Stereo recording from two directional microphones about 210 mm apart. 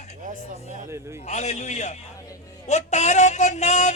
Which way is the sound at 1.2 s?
35° left (ahead or behind).